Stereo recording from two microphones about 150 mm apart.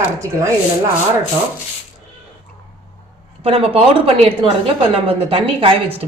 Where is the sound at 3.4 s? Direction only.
40° right (ahead or behind).